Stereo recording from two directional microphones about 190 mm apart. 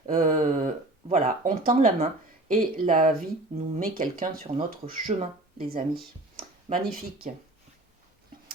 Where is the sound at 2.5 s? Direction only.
45° right (ahead or behind).